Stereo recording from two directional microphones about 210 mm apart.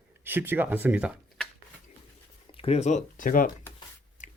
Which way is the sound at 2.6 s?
30° left (ahead or behind).